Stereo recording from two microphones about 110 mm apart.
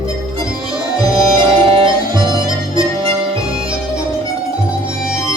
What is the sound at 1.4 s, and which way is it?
Music, 50° right (ahead or behind).